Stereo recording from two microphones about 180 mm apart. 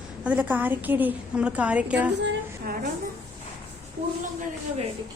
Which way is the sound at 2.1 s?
75° right (ahead or behind).